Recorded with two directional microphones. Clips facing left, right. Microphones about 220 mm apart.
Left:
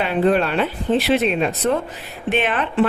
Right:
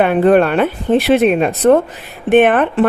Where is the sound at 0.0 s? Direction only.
55° right (ahead or behind).